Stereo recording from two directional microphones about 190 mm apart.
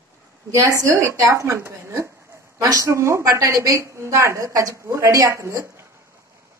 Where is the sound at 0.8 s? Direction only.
15° right (ahead or behind).